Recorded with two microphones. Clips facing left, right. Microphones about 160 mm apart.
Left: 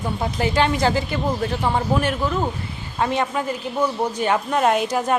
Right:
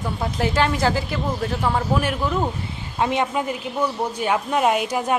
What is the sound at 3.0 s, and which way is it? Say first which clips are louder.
Speech: even; 15° right (ahead or behind).